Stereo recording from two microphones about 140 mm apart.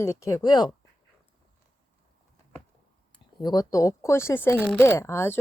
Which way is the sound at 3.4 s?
30° left (ahead or behind).